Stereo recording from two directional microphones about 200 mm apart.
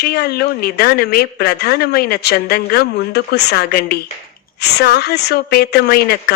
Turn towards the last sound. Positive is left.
turn(degrees=55)  # may be behind; listen again after turning